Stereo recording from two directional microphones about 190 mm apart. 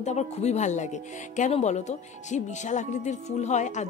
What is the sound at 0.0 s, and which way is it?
Speech, 35° left (ahead or behind).